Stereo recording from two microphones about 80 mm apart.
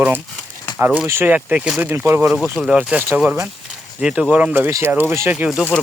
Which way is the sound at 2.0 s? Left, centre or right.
Right.